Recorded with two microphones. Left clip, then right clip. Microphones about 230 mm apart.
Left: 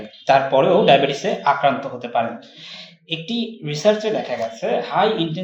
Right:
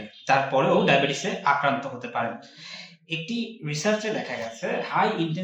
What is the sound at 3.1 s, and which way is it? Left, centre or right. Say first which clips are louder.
Speech: left 5 dB; centre.